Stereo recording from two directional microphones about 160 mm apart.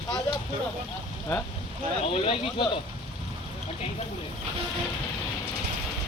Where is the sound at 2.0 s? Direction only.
35° left (ahead or behind).